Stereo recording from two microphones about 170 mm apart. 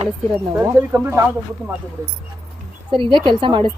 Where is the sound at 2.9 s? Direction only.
30° right (ahead or behind).